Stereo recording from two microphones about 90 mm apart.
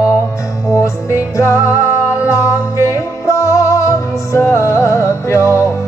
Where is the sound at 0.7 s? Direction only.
35° left (ahead or behind).